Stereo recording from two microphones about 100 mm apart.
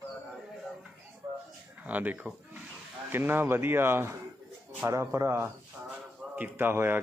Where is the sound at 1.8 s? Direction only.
15° right (ahead or behind).